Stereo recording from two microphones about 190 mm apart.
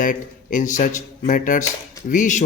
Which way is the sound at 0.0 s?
45° left (ahead or behind).